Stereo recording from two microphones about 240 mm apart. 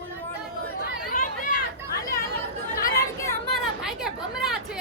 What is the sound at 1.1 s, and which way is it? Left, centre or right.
Chatter, left.